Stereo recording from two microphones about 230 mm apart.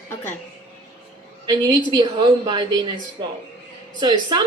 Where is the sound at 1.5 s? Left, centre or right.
Centre.